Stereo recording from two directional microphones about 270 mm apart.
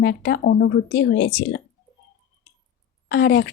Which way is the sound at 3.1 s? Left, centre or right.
Left.